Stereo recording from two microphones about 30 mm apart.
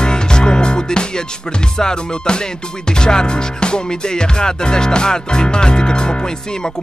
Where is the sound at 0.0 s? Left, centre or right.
Left.